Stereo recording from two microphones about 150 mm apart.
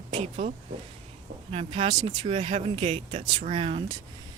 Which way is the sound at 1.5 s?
40° right (ahead or behind).